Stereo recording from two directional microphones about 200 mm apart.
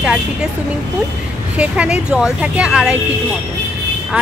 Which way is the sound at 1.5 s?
5° right (ahead or behind).